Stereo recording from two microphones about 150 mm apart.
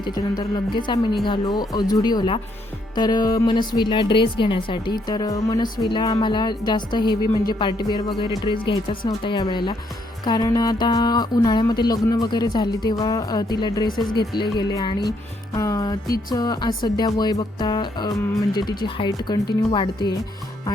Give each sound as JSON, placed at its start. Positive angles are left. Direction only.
{"t": 0.0, "sound": "speech", "side_deg": 25}